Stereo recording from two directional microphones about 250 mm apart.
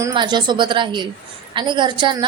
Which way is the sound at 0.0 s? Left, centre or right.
Centre.